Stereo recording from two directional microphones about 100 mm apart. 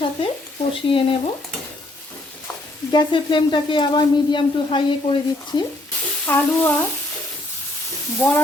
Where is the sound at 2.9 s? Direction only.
50° left (ahead or behind).